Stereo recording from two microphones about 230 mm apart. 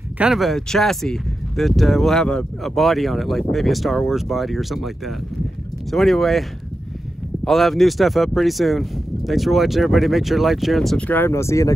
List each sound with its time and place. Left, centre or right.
0.2 s speech: centre
7.4 s speech: centre